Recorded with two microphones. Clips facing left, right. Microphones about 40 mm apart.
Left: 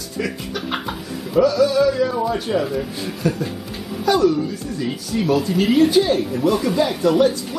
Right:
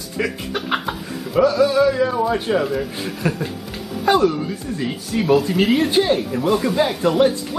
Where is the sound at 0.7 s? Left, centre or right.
Centre.